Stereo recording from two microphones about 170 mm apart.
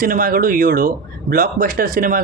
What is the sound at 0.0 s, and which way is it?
Speech, 55° right (ahead or behind).